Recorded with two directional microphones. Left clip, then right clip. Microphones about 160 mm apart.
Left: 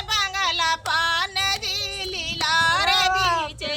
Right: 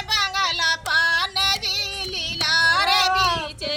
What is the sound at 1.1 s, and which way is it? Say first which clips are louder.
Music: right 2 dB; 15° left (ahead or behind).